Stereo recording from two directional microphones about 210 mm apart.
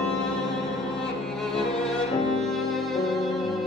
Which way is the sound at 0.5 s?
Centre (ahead or behind).